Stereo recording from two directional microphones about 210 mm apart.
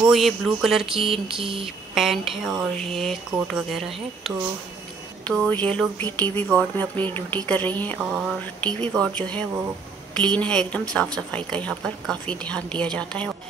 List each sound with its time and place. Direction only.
0.0 s speech: centre (ahead or behind)
0.9 s mantra: 25° right (ahead or behind)
2.0 s speech: centre (ahead or behind)